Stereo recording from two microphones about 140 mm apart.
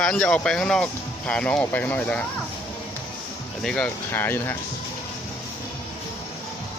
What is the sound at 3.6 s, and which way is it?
Speech, 5° left (ahead or behind).